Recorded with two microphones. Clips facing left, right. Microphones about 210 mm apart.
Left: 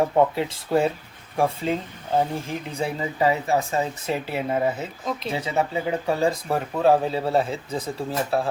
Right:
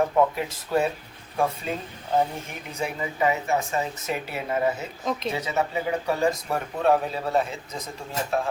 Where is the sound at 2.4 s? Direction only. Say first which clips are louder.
Left 4 dB; 30° left (ahead or behind).